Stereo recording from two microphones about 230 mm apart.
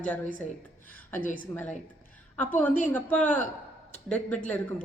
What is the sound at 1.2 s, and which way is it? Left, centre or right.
Speech, left.